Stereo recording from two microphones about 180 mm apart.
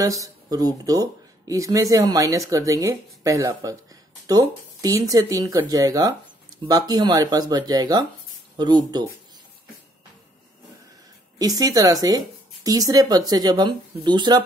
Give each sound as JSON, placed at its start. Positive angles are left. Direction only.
{"t": 0.0, "sound": "speech", "side_deg": -20}
{"t": 11.3, "sound": "speech", "side_deg": -20}